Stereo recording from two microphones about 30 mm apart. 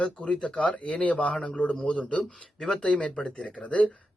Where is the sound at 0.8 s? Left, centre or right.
Left.